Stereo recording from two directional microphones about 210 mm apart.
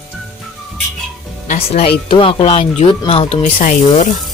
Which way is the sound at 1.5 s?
30° left (ahead or behind).